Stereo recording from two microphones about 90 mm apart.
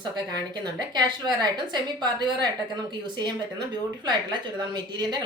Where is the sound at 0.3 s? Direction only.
50° right (ahead or behind).